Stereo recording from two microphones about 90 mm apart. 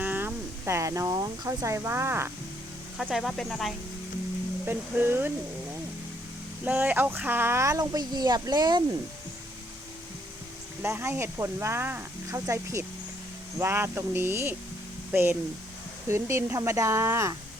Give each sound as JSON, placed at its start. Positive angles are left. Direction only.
{"t": 0.0, "sound": "a sound", "side_deg": -20}
{"t": 1.5, "sound": "speech", "side_deg": -35}
{"t": 3.0, "sound": "speech", "side_deg": -5}
{"t": 4.6, "sound": "speech", "side_deg": -25}
{"t": 6.7, "sound": "speech", "side_deg": -20}
{"t": 7.8, "sound": "speech", "side_deg": -45}
{"t": 10.8, "sound": "speech", "side_deg": -25}
{"t": 12.3, "sound": "speech", "side_deg": -35}